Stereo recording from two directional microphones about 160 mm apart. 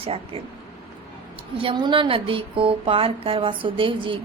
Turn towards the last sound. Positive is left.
turn(degrees=-30)  # may be behind; listen again after turning